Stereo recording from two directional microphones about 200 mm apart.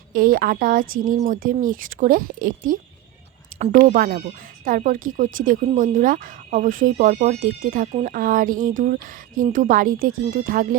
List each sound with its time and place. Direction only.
0.1 s a woman's voice: 45° right (ahead or behind)